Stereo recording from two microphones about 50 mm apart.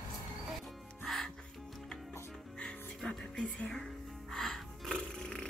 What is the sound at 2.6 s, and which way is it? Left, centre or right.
Music, centre.